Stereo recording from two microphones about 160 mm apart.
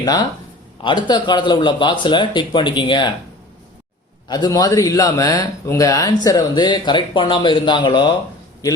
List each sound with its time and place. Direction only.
0.0 s speech: 25° left (ahead or behind)
4.3 s speech: 25° left (ahead or behind)